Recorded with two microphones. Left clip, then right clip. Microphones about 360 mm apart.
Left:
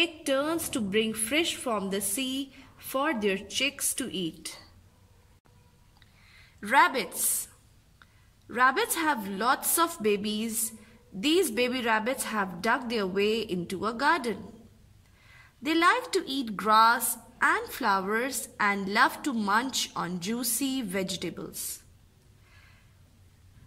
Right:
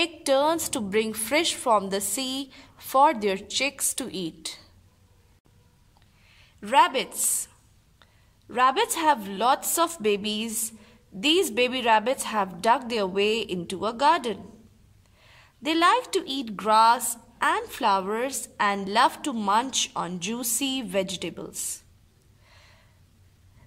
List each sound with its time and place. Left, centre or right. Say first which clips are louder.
0.0 s speech: right 5 dB; centre
6.3 s a woman's voice: right 3 dB; centre